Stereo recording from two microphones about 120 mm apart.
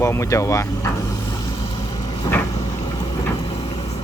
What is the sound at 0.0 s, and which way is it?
Speech, 25° left (ahead or behind).